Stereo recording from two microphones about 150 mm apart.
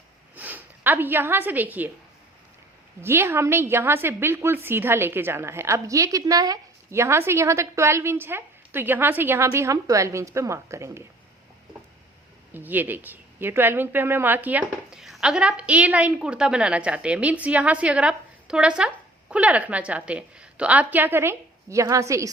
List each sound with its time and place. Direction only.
0.3 s a woman's voice: 10° right (ahead or behind)
3.0 s a woman's voice: 15° right (ahead or behind)
12.5 s a woman's voice: 10° right (ahead or behind)